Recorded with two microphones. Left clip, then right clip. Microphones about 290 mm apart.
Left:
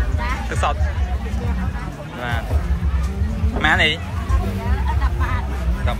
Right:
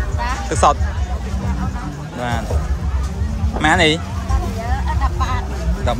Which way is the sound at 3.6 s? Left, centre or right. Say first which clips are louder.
Right 2 dB; centre.